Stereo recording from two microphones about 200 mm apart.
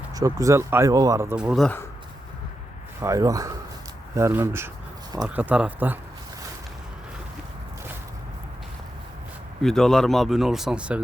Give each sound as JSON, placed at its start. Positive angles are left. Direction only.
{"t": 0.1, "sound": "speech", "side_deg": -15}
{"t": 3.0, "sound": "speech", "side_deg": -15}
{"t": 9.6, "sound": "speech", "side_deg": 0}